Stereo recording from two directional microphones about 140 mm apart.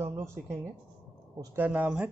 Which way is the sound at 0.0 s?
20° right (ahead or behind).